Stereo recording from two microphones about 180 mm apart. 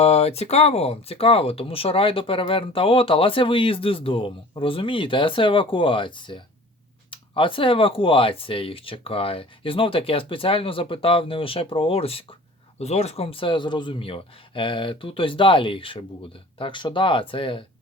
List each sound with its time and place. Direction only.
0.0 s speech: 35° left (ahead or behind)